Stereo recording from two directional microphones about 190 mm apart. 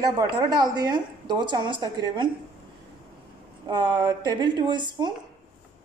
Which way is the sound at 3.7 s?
25° right (ahead or behind).